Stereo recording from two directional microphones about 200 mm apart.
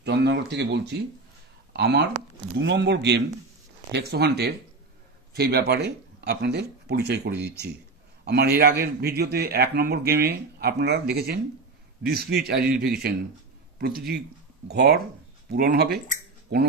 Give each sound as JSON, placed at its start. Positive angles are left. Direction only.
{"t": 0.0, "sound": "a man's voice", "side_deg": -60}